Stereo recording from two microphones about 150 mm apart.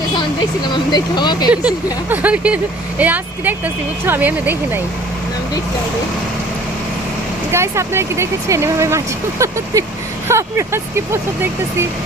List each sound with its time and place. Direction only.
0.7 s speech: 30° left (ahead or behind)
1.5 s speech: 10° right (ahead or behind)
7.5 s speech: 15° right (ahead or behind)